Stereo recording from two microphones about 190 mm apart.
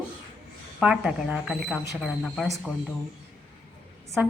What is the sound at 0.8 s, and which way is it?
A woman's voice, 5° right (ahead or behind).